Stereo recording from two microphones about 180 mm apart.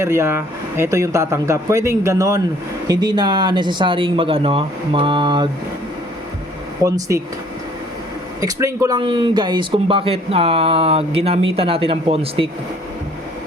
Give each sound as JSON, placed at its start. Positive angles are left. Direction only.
{"t": 0.0, "sound": "speech", "side_deg": -15}
{"t": 6.8, "sound": "speech", "side_deg": -15}
{"t": 8.4, "sound": "speech", "side_deg": -20}